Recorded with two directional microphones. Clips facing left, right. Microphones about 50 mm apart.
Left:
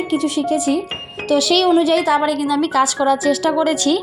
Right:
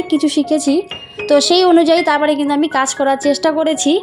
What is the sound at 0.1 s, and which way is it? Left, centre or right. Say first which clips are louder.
Speech: right 5 dB; right.